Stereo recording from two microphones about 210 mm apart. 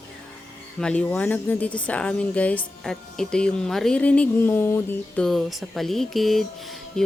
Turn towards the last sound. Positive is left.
turn(degrees=0)  # may be behind; listen again after turning